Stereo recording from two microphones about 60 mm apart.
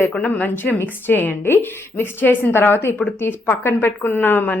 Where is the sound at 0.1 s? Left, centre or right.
Left.